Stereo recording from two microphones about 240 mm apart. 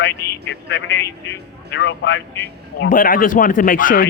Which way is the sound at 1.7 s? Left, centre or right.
Left.